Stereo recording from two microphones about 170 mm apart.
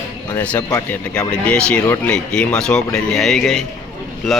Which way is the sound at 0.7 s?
10° left (ahead or behind).